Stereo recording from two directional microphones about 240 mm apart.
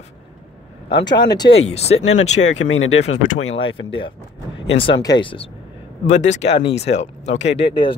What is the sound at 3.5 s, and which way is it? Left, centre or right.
Speech, left.